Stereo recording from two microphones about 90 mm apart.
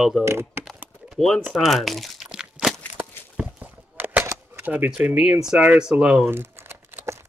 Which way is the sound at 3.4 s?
15° right (ahead or behind).